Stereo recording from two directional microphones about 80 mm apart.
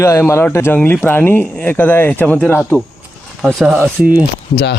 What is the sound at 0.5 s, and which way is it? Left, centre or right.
Speech, left.